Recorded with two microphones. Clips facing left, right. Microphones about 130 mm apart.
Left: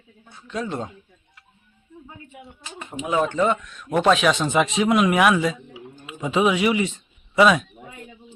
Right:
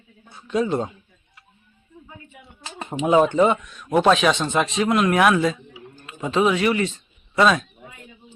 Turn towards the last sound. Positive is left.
turn(degrees=5)  # may be behind; listen again after turning